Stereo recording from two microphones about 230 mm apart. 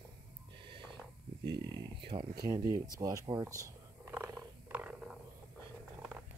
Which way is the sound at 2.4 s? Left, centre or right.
Centre.